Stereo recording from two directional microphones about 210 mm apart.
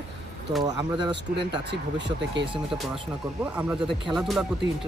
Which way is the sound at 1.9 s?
55° right (ahead or behind).